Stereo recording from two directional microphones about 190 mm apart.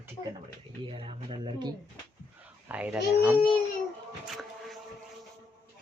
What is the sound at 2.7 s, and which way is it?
Speech, 5° right (ahead or behind).